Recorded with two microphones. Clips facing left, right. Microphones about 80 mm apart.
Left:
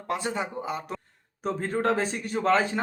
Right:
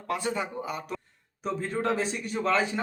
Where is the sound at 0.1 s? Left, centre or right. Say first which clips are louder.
Left 1 dB; left.